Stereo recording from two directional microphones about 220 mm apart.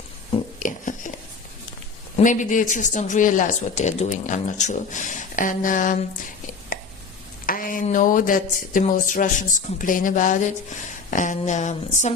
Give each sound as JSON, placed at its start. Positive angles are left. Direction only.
{"t": 0.6, "sound": "a sound", "side_deg": 35}
{"t": 2.1, "sound": "a man's voice", "side_deg": 35}
{"t": 7.4, "sound": "a man's voice", "side_deg": 40}